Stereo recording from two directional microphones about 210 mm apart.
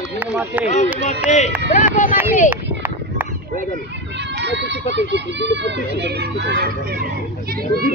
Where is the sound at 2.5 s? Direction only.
10° right (ahead or behind).